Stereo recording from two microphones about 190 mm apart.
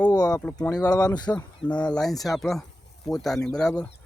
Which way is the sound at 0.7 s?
20° left (ahead or behind).